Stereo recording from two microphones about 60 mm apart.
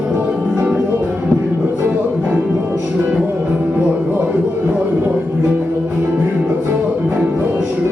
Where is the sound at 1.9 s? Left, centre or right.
Centre.